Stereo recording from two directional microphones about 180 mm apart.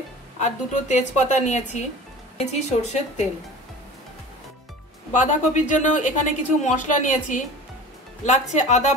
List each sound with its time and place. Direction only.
0.4 s a woman's voice: 40° left (ahead or behind)
5.1 s a woman's voice: 40° left (ahead or behind)